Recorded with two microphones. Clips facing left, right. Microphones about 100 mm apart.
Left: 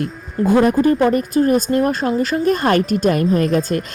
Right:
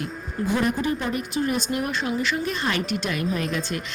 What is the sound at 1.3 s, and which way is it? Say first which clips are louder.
A woman's voice: left 10 dB; 45° left (ahead or behind).